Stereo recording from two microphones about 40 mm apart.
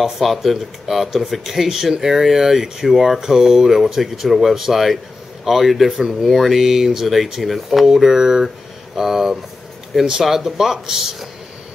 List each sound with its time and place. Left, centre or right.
0.0 s speech: centre
5.9 s speech: centre
6.3 s speech: centre
7.9 s speech: centre